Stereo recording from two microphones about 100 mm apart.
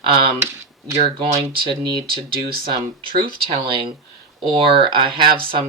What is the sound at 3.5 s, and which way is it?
Speech, 65° right (ahead or behind).